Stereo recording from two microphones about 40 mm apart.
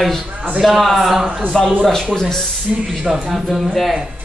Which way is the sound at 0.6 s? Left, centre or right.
Centre.